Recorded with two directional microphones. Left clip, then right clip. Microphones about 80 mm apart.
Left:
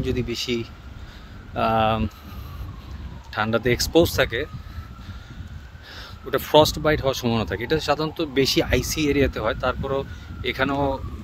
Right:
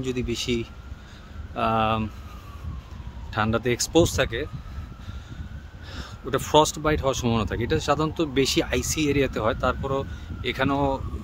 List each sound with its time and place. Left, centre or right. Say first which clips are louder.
0.0 s speech: left 2 dB; right
3.3 s speech: left 2 dB; right
5.9 s speech: left 2 dB; right
7.5 s speech: left 2 dB; right